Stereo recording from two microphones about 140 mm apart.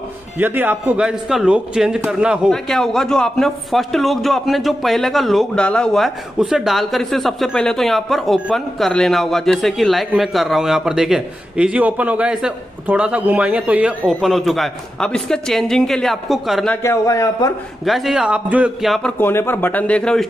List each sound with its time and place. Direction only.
0.4 s a man's voice: 15° right (ahead or behind)
16.8 s a man's voice: 20° left (ahead or behind)
17.8 s a man's voice: centre (ahead or behind)
19.1 s speech: 15° left (ahead or behind)